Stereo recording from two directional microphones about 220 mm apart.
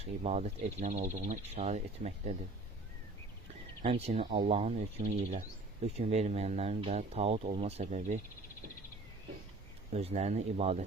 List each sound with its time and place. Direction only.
0.0 s speech: 30° right (ahead or behind)
3.8 s speech: 25° right (ahead or behind)
9.9 s speech: 30° right (ahead or behind)